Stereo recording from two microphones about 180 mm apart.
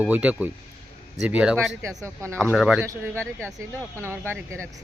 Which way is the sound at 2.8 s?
15° right (ahead or behind).